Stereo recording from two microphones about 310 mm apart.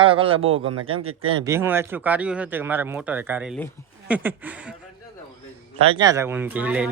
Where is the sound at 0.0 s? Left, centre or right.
Centre.